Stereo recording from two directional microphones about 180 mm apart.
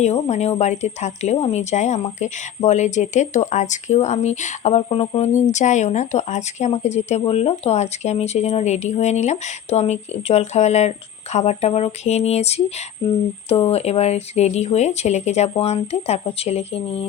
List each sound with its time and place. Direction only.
0.0 s speech: 40° left (ahead or behind)